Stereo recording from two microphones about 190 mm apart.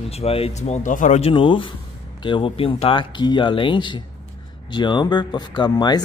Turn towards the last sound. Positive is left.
turn(degrees=20)  # may be behind; listen again after turning